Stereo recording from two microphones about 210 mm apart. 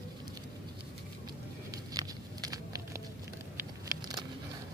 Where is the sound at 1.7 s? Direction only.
15° right (ahead or behind).